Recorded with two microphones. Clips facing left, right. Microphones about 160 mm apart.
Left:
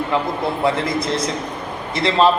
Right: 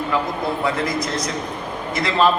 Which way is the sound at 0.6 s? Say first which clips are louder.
Left 5 dB; 30° left (ahead or behind).